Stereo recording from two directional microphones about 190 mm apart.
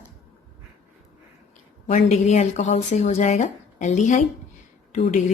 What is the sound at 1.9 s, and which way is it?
Speech, 35° left (ahead or behind).